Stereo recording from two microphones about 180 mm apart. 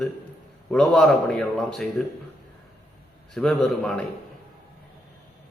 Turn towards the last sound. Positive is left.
turn(degrees=0)  # may be behind; listen again after turning